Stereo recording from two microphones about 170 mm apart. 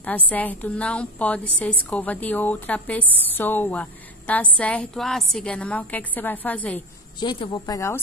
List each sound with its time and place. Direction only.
0.3 s a woman's voice: 10° left (ahead or behind)
7.2 s a woman's voice: 25° left (ahead or behind)